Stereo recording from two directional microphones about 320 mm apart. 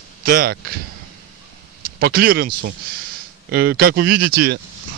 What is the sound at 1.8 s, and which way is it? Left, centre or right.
Speech, right.